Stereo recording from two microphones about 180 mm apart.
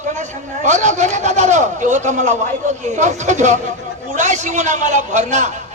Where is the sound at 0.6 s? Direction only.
40° right (ahead or behind).